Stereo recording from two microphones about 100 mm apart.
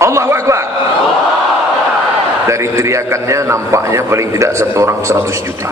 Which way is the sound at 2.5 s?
30° right (ahead or behind).